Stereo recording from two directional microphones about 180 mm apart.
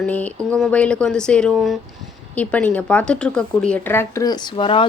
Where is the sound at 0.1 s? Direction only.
10° left (ahead or behind).